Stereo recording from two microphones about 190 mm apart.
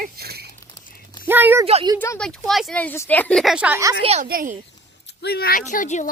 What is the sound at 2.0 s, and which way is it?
Speech, 10° left (ahead or behind).